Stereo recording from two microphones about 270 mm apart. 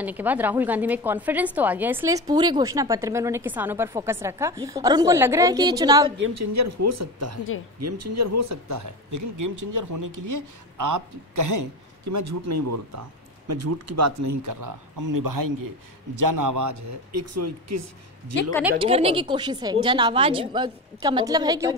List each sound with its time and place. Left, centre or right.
0.0 s a woman's voice: centre
6.3 s speech: right
13.5 s speech: right
16.2 s speech: right
18.8 s a woman's voice: right